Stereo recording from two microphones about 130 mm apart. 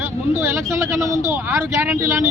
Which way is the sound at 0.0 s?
15° right (ahead or behind).